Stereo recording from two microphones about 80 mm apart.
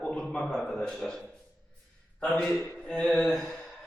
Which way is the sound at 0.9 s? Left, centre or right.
Centre.